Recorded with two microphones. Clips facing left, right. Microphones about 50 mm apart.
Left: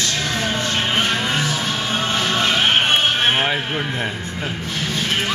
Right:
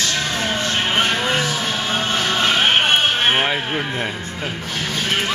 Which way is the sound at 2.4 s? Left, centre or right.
Centre.